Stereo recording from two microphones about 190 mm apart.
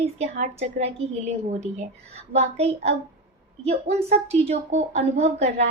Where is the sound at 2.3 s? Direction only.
35° right (ahead or behind).